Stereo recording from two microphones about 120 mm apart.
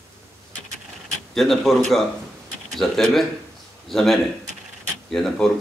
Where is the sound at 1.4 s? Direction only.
Centre (ahead or behind).